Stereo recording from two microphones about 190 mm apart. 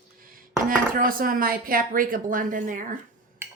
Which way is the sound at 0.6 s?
45° right (ahead or behind).